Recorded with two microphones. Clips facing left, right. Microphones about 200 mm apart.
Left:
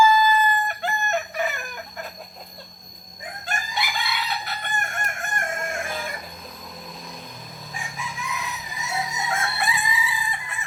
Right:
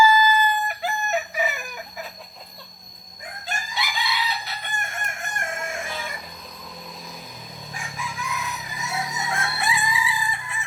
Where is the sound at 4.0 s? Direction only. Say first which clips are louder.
Right 1 dB; 55° left (ahead or behind).